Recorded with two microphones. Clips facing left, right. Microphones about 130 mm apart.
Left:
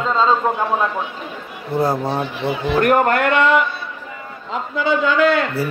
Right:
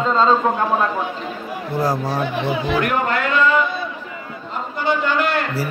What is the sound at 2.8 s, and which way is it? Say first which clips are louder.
Speech: left 9 dB; 50° left (ahead or behind).